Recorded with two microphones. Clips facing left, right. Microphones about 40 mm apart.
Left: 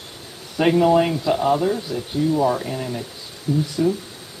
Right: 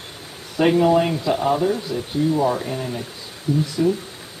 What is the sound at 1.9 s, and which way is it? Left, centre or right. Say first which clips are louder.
Speech: right 1 dB; right.